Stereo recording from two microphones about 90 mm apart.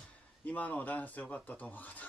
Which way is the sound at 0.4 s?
20° left (ahead or behind).